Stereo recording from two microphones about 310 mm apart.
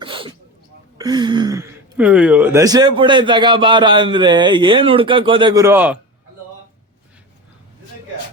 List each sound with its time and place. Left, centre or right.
0.0 s sneeze: centre
0.9 s speech: centre